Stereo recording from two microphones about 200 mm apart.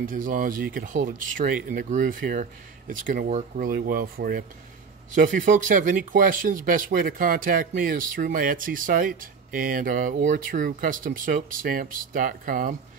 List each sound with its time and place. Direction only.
0.0 s speech: 40° right (ahead or behind)